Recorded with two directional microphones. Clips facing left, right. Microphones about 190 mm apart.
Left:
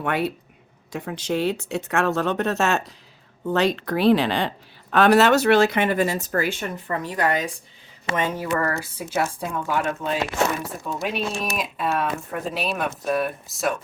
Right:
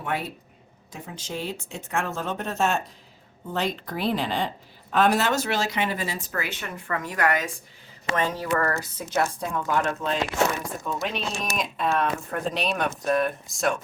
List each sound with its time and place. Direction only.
0.0 s a woman's voice: 70° left (ahead or behind); by 7.5 s 30° left (ahead or behind)
8.1 s speech: 10° left (ahead or behind)